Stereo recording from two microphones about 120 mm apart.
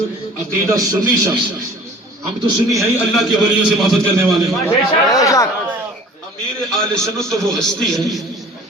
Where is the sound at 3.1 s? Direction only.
Centre (ahead or behind).